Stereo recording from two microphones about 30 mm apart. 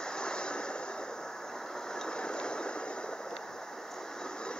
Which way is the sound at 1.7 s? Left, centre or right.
Left.